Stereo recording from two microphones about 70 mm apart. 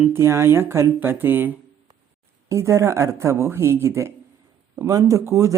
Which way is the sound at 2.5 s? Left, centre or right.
Right.